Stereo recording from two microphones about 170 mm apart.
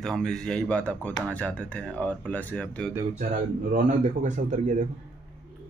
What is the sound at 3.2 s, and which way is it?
A man's voice, 50° right (ahead or behind).